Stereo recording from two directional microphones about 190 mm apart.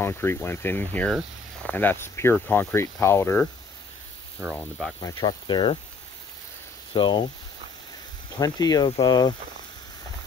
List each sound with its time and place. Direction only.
0.0 s speech: 15° left (ahead or behind)
4.6 s speech: centre (ahead or behind)
5.0 s speech: 25° left (ahead or behind)
6.9 s speech: 25° left (ahead or behind)
8.4 s speech: 20° left (ahead or behind)